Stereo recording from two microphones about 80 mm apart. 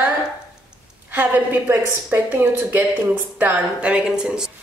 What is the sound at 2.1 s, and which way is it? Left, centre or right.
Speech, right.